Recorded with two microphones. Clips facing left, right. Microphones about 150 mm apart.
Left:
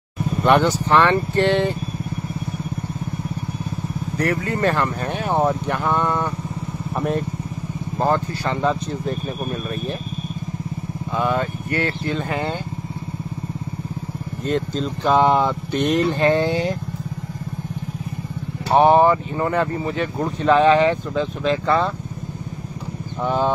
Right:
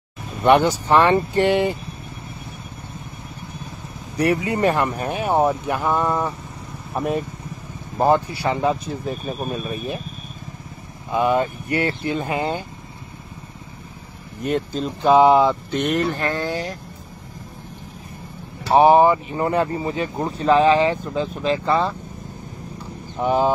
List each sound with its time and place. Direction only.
0.4 s speech: 10° right (ahead or behind)
4.2 s speech: 15° right (ahead or behind)
11.1 s speech: 15° right (ahead or behind)
14.4 s speech: 10° right (ahead or behind)
16.1 s speech: 25° left (ahead or behind)
18.7 s speech: 5° right (ahead or behind)
19.3 s speech: 20° right (ahead or behind)
20.3 s speech: 35° right (ahead or behind)
21.1 s speech: 5° right (ahead or behind)
23.2 s speech: 15° right (ahead or behind)